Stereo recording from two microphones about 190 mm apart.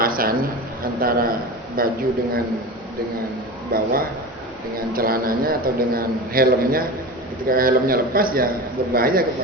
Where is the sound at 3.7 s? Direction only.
50° right (ahead or behind).